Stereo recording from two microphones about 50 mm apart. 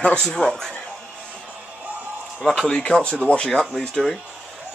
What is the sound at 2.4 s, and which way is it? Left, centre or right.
Speech, centre.